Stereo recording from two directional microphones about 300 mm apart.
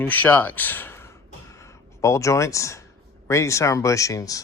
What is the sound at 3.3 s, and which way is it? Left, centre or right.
Speech, centre.